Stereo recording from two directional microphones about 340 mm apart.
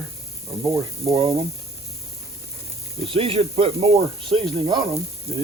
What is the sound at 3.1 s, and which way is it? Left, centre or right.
Speech, centre.